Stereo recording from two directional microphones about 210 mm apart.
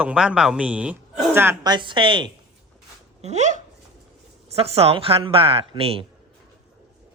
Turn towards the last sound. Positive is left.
turn(degrees=-25)  # may be behind; listen again after turning